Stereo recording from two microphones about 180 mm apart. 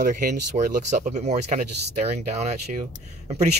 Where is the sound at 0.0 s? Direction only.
50° right (ahead or behind).